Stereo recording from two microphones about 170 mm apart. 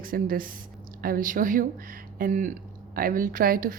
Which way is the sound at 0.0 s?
55° right (ahead or behind).